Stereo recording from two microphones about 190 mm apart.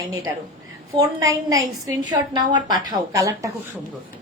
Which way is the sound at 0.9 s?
20° right (ahead or behind).